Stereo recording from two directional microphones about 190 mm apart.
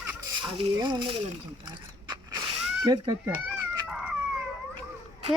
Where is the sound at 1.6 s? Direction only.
25° right (ahead or behind).